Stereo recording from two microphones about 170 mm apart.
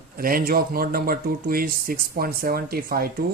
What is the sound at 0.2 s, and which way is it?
Speech, 60° right (ahead or behind).